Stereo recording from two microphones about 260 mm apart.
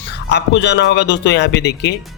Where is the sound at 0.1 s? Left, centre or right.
Left.